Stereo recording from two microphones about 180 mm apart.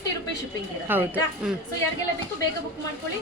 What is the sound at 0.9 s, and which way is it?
Speech, 10° right (ahead or behind).